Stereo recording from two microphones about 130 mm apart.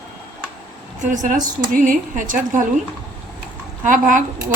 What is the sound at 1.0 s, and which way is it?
Speech, 70° right (ahead or behind).